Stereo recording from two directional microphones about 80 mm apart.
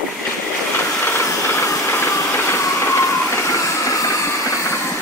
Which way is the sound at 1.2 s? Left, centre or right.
Left.